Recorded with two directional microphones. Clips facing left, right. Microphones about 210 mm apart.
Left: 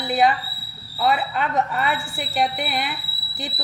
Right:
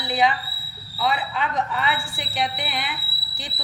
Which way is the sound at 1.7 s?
40° left (ahead or behind).